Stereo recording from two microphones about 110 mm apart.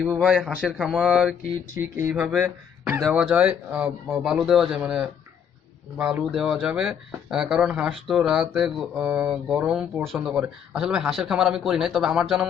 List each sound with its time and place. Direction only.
0.2 s speech: centre (ahead or behind); by 3.0 s 20° right (ahead or behind)
3.1 s speech: 10° right (ahead or behind)